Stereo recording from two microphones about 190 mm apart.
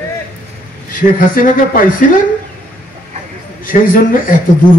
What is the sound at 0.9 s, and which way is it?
A woman's voice, 45° left (ahead or behind).